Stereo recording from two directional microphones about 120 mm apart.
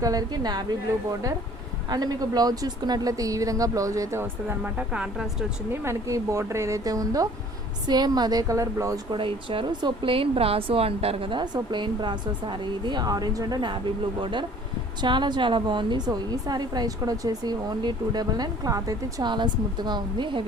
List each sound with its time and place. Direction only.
0.0 s a woman's voice: 30° right (ahead or behind)
1.9 s a woman's voice: 35° right (ahead or behind); by 5.5 s 5° right (ahead or behind)
5.7 s a woman's voice: 20° right (ahead or behind)
9.1 s a woman's voice: 45° right (ahead or behind)